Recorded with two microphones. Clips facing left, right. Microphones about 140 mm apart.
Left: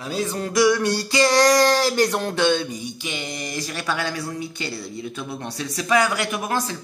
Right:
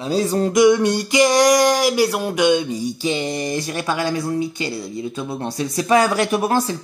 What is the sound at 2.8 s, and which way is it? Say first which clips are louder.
Speech: right 9 dB; 35° right (ahead or behind).